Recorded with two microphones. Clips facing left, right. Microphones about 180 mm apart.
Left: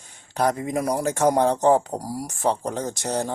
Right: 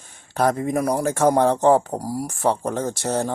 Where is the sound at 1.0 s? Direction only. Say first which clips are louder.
Right 2 dB; 20° left (ahead or behind).